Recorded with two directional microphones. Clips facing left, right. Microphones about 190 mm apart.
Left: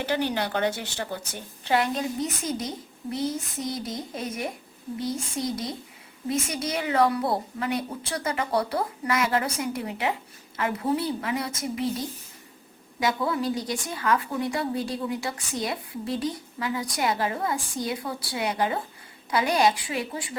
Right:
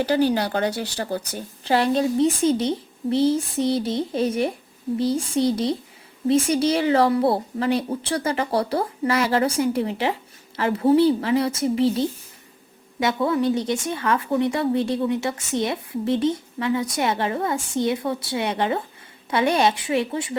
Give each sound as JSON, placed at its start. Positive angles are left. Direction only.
{"t": 0.0, "sound": "a woman's voice", "side_deg": -35}